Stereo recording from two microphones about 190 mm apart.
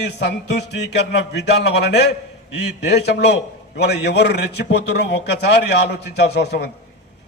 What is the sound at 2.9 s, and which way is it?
A man's voice, 60° left (ahead or behind).